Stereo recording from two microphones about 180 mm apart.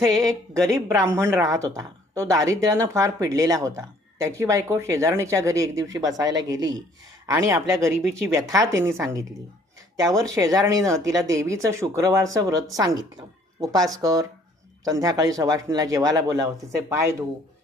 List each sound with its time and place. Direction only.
0.7 s a woman's voice: 15° right (ahead or behind)